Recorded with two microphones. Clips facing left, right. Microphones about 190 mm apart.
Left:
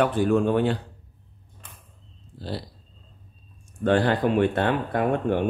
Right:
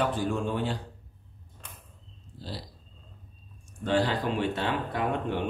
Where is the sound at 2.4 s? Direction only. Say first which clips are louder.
Left 7 dB; 60° left (ahead or behind).